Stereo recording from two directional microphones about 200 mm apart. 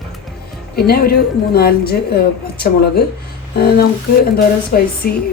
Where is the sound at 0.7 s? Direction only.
50° left (ahead or behind).